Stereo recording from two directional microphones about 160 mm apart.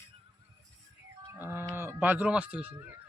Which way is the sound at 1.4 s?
15° right (ahead or behind).